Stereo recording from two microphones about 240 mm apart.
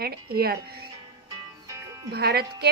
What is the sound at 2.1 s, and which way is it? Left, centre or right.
Speech, right.